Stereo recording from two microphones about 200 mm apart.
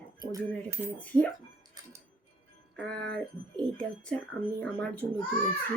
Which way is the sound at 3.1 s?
5° left (ahead or behind).